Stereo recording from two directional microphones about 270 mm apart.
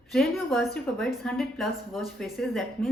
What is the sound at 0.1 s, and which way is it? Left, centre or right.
A woman's voice, centre.